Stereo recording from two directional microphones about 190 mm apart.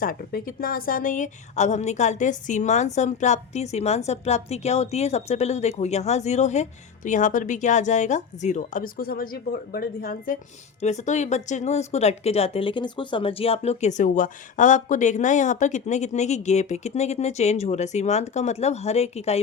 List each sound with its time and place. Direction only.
0.0 s a woman's voice: 50° left (ahead or behind)
10.8 s a woman's voice: 35° left (ahead or behind)